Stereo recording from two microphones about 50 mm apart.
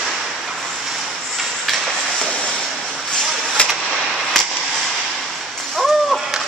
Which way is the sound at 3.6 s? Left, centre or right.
Left.